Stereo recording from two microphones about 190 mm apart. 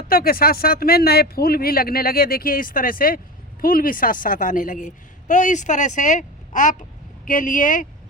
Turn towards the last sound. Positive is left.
turn(degrees=45)  # may be behind; listen again after turning